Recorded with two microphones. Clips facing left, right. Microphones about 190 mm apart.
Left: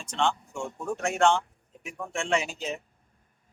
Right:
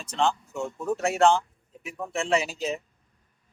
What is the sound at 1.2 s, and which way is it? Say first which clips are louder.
Speech: right 2 dB; 35° right (ahead or behind).